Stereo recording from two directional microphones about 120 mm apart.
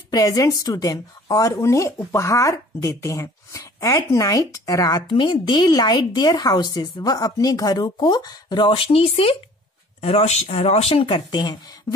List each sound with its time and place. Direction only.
0.1 s a woman's voice: 30° left (ahead or behind)
5.1 s speech: 40° left (ahead or behind)
11.2 s speech: 35° left (ahead or behind)